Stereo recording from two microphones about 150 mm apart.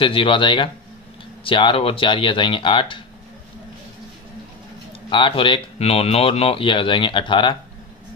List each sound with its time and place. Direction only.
0.0 s speech: 35° left (ahead or behind)
5.1 s speech: 35° left (ahead or behind)